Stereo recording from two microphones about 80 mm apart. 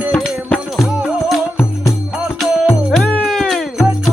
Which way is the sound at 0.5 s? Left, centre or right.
Centre.